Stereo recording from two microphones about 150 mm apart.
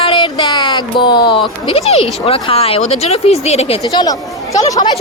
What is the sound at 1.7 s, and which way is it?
Speech, 45° left (ahead or behind).